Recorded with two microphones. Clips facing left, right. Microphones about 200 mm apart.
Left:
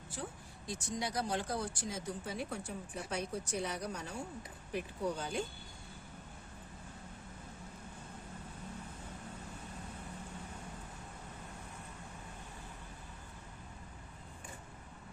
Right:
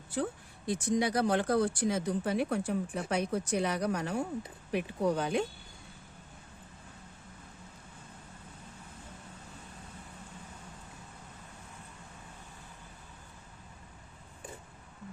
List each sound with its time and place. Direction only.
0.7 s speech: 65° right (ahead or behind)